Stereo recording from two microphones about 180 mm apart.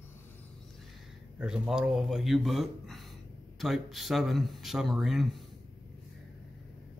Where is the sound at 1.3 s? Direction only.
5° right (ahead or behind).